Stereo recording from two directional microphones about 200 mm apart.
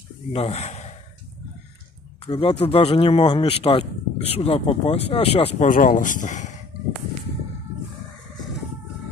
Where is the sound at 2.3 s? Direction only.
30° left (ahead or behind).